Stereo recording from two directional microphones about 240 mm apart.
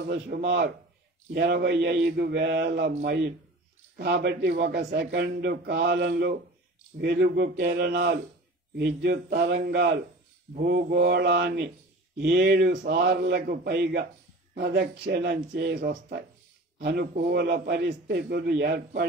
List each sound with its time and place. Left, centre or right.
0.1 s a man's voice: right